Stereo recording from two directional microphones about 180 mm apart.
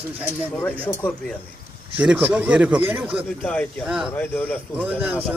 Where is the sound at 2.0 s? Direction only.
10° right (ahead or behind).